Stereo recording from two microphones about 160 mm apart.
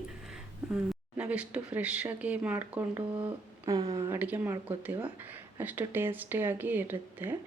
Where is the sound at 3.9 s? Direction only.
25° right (ahead or behind).